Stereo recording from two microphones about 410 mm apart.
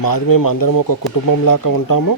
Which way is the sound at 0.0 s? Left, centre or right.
Left.